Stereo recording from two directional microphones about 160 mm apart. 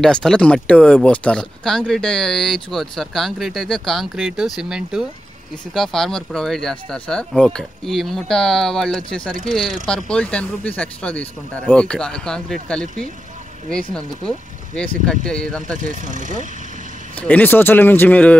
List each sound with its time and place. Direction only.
0.0 s speech: 5° left (ahead or behind)
13.7 s speech: 5° left (ahead or behind)
15.8 s speech: 55° right (ahead or behind)
17.2 s speech: 10° left (ahead or behind)